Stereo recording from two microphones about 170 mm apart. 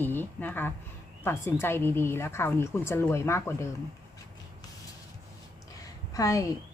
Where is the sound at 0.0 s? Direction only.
10° left (ahead or behind).